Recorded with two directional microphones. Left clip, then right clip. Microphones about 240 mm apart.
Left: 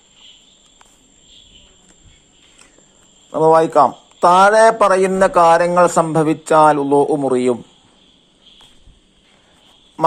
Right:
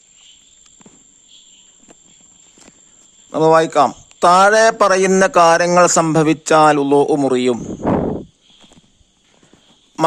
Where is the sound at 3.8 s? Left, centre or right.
Right.